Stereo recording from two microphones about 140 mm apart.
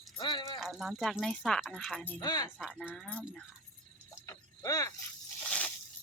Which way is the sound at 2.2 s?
30° left (ahead or behind).